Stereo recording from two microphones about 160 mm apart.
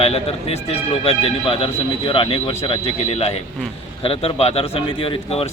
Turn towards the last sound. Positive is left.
turn(degrees=35)  # may be behind; listen again after turning